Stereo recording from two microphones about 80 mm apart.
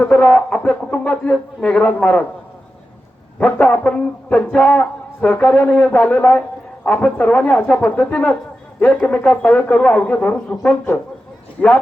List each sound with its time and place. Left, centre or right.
0.0 s music: centre
3.3 s music: centre
8.9 s speech: centre
10.5 s music: centre